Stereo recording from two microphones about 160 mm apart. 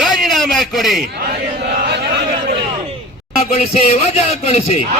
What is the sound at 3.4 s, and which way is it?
Speech, 40° left (ahead or behind).